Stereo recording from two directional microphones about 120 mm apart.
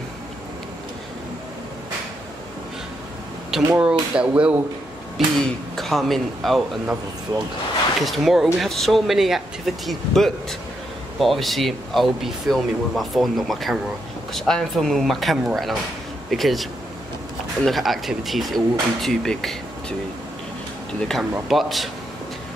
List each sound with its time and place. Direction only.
3.5 s speech: 5° right (ahead or behind)
5.1 s speech: centre (ahead or behind)
7.3 s speech: 40° right (ahead or behind)
8.0 s speech: centre (ahead or behind)
17.6 s speech: centre (ahead or behind)
21.1 s speech: centre (ahead or behind)